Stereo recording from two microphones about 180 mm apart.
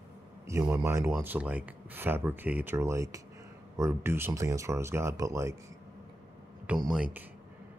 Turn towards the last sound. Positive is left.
turn(degrees=-5)  # may be behind; listen again after turning